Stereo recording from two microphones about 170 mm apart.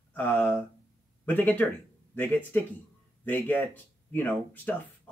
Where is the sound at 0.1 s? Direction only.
10° left (ahead or behind).